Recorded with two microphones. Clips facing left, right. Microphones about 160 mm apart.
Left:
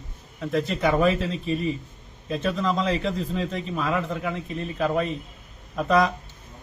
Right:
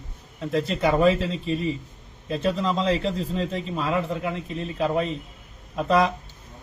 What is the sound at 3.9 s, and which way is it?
A man's voice, centre (ahead or behind).